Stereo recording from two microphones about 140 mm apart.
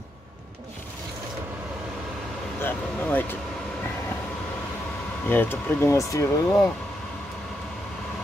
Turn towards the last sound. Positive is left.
turn(degrees=20)  # may be behind; listen again after turning